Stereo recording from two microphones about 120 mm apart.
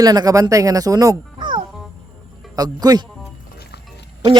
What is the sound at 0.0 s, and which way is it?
Speech, 30° right (ahead or behind).